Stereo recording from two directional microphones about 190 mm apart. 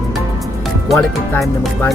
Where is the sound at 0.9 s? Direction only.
Centre (ahead or behind).